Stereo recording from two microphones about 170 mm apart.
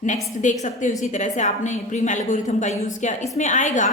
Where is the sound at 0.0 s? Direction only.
45° left (ahead or behind).